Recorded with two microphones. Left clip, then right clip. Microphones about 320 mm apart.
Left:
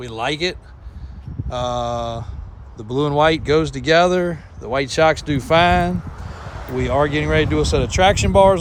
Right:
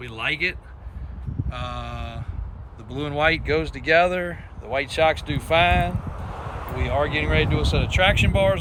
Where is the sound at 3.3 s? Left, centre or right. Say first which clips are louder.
Left 6 dB; left.